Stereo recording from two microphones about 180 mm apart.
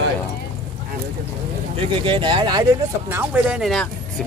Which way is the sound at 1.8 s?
30° right (ahead or behind).